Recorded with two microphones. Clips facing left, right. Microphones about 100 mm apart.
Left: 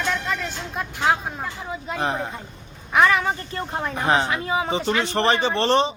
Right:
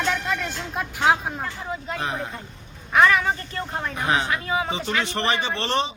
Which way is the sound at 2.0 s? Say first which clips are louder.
Left 6 dB; 35° left (ahead or behind).